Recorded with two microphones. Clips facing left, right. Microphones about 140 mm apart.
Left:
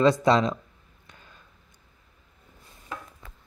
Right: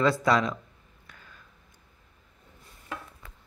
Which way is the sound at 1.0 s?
25° left (ahead or behind).